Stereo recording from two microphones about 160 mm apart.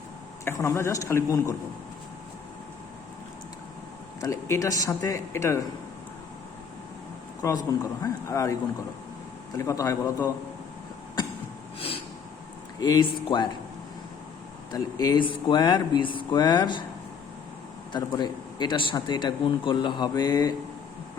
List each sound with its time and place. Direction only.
0.4 s speech: 20° left (ahead or behind)
4.2 s speech: 20° left (ahead or behind)
7.4 s speech: 20° left (ahead or behind)
9.6 s speech: 20° left (ahead or behind)
12.8 s speech: 25° left (ahead or behind)
14.7 s speech: 25° left (ahead or behind)
17.9 s speech: 25° left (ahead or behind)